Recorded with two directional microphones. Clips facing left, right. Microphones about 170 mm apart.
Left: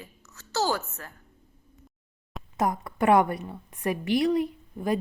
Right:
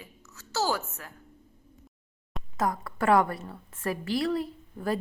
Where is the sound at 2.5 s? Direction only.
20° left (ahead or behind).